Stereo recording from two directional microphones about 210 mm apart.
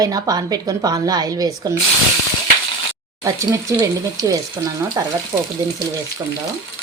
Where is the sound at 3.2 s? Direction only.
15° right (ahead or behind).